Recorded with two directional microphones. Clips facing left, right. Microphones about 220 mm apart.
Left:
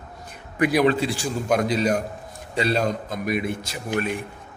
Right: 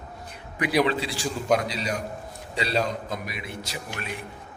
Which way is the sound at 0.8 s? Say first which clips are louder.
Left 6 dB; 50° left (ahead or behind).